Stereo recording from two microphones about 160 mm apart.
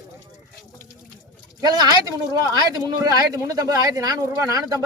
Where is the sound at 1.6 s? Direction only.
25° right (ahead or behind).